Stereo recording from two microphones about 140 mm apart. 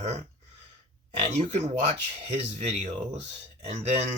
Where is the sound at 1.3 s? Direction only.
50° right (ahead or behind).